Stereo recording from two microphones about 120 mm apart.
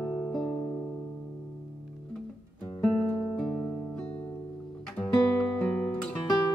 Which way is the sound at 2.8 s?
10° left (ahead or behind).